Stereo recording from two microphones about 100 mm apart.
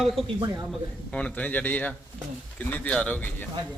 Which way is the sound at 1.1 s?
10° left (ahead or behind).